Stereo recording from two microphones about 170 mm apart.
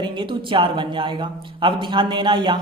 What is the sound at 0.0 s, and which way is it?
Speech, 30° right (ahead or behind).